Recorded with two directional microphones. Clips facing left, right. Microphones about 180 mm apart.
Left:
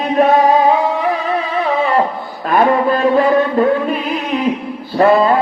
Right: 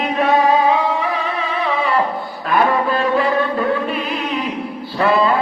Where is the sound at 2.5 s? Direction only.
45° left (ahead or behind).